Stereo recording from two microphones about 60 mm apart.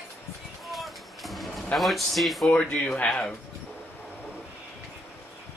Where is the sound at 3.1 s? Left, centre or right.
Centre.